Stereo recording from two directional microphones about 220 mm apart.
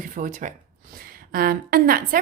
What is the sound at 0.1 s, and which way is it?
A woman's voice, 35° right (ahead or behind).